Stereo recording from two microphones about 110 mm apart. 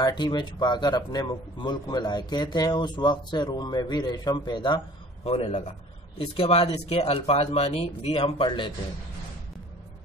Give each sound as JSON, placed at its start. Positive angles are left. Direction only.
{"t": 0.0, "sound": "speech", "side_deg": 40}
{"t": 5.2, "sound": "a man's voice", "side_deg": 65}